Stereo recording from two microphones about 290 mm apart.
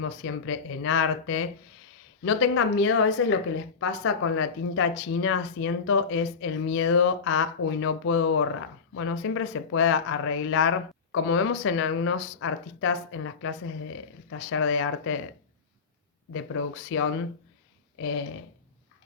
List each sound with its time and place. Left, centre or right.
0.0 s speech: left
16.3 s speech: left